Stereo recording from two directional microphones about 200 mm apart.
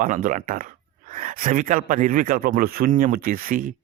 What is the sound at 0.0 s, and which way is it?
Speech, 40° right (ahead or behind).